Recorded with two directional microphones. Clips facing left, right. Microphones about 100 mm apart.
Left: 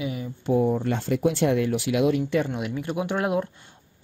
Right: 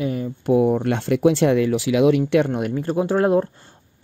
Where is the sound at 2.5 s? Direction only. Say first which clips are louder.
Right 6 dB; 45° right (ahead or behind).